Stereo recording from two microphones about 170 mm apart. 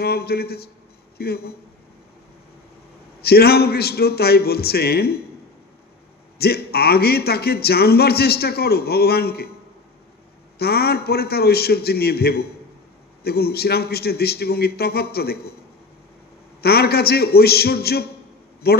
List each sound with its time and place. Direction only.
0.0 s speech: 65° left (ahead or behind)
3.2 s speech: 65° left (ahead or behind)
6.3 s speech: 65° left (ahead or behind)
10.6 s speech: 65° left (ahead or behind)
16.6 s speech: 70° left (ahead or behind)